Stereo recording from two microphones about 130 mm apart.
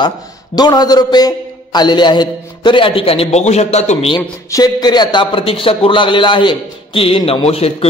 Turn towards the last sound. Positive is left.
turn(degrees=50)  # may be behind; listen again after turning